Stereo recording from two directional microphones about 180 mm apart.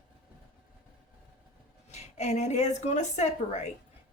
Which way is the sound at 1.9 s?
40° left (ahead or behind).